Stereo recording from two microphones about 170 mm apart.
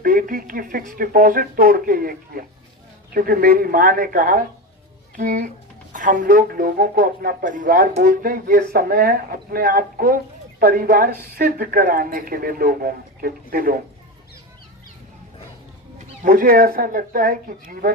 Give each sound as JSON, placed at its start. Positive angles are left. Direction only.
{"t": 0.0, "sound": "speech", "side_deg": -55}
{"t": 16.2, "sound": "speech", "side_deg": -55}